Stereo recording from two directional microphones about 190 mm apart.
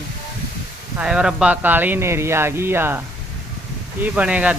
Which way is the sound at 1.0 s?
5° right (ahead or behind).